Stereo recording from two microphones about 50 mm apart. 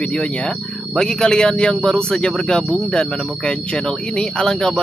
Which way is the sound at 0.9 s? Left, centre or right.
Centre.